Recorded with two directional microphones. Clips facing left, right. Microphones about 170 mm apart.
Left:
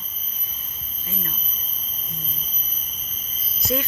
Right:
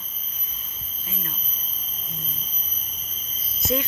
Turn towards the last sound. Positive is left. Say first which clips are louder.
# even
turn(degrees=-20)  # may be behind; listen again after turning